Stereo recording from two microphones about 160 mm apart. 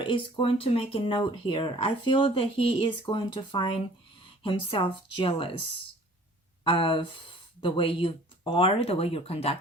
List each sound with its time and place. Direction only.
0.0 s speech: 30° left (ahead or behind)
6.7 s speech: 35° left (ahead or behind)